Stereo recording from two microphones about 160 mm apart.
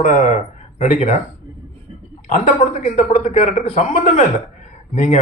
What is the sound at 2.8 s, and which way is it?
A man's voice, 45° left (ahead or behind).